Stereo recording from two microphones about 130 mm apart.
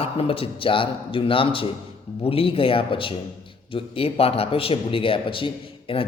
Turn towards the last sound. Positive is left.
turn(degrees=45)  # may be behind; listen again after turning